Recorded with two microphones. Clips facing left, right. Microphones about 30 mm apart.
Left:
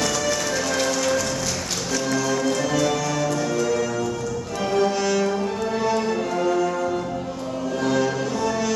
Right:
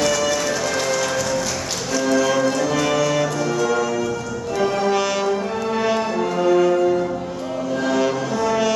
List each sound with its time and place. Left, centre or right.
0.0 s music: centre
2.0 s music: right
2.4 s music: centre
2.8 s music: right
3.6 s music: right
4.6 s music: centre
4.9 s music: right
5.9 s music: centre